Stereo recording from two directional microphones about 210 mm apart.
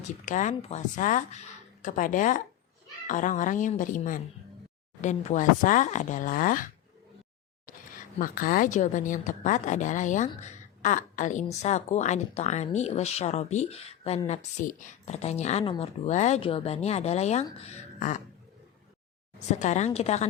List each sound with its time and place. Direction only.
0.0 s a woman's voice: 35° left (ahead or behind)
8.2 s a woman's voice: 40° left (ahead or behind)
19.5 s a woman's voice: 35° left (ahead or behind)